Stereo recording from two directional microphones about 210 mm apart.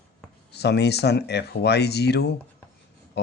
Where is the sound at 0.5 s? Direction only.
50° left (ahead or behind).